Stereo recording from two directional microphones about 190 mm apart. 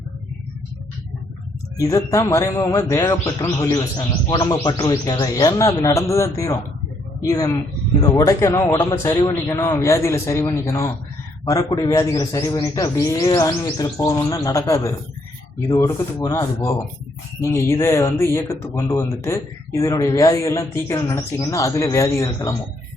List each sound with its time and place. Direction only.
1.8 s speech: 15° left (ahead or behind)